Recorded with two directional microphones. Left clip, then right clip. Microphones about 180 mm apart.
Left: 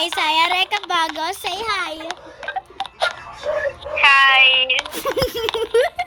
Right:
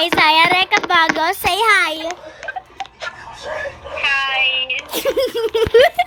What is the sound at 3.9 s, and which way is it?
Meow, 55° left (ahead or behind).